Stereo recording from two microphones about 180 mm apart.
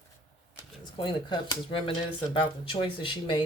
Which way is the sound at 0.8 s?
25° left (ahead or behind).